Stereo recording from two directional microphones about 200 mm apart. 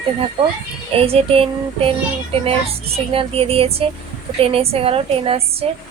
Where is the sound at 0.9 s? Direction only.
30° right (ahead or behind).